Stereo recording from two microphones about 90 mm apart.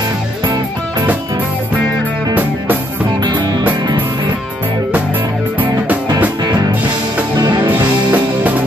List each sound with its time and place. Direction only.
3.3 s music: 55° right (ahead or behind)
7.3 s music: 50° right (ahead or behind)
7.7 s music: 20° right (ahead or behind)